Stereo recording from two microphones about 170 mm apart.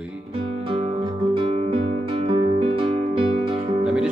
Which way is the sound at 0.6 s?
35° right (ahead or behind).